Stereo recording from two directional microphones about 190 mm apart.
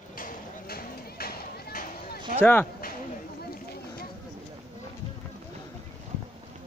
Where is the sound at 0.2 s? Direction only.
50° left (ahead or behind).